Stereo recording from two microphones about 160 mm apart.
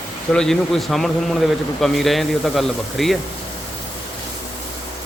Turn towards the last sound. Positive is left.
turn(degrees=0)  # may be behind; listen again after turning